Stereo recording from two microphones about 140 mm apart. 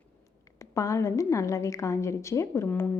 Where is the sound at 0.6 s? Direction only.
20° left (ahead or behind).